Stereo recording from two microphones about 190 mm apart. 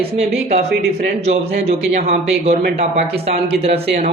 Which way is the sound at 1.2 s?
35° right (ahead or behind).